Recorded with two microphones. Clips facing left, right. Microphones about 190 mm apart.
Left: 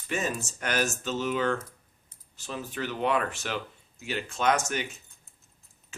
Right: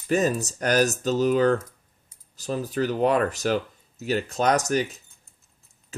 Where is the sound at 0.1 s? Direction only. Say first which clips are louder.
Right 9 dB; 40° right (ahead or behind).